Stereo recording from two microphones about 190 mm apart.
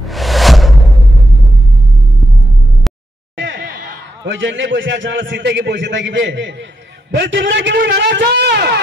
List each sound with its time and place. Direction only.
0.0 s music: centre (ahead or behind)
3.3 s a sound: 80° right
3.7 s a man's voice: 75° right (ahead or behind); by 8.7 s 60° right (ahead or behind)